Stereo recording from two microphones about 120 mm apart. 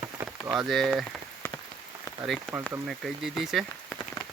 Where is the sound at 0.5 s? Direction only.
5° left (ahead or behind).